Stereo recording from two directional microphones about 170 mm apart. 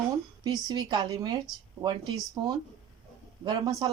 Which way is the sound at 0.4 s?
25° right (ahead or behind).